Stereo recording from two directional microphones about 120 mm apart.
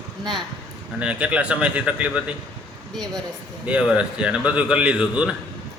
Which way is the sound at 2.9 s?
5° left (ahead or behind).